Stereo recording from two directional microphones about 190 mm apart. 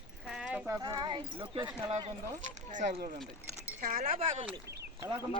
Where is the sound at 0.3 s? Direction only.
5° right (ahead or behind).